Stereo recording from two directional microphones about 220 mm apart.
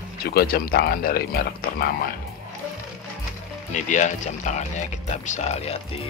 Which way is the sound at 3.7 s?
35° left (ahead or behind).